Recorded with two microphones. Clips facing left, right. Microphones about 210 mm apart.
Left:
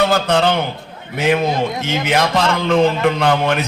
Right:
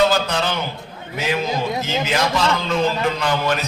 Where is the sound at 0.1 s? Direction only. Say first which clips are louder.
Left 5 dB; 60° left (ahead or behind).